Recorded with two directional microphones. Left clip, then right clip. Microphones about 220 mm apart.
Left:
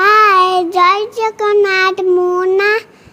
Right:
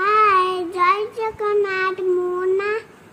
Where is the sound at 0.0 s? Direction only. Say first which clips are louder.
Left 7 dB; 30° left (ahead or behind).